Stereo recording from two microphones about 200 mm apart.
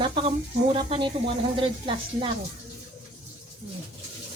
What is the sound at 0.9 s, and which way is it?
A woman's voice, 25° right (ahead or behind).